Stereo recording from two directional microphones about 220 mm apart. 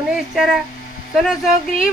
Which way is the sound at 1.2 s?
Centre (ahead or behind).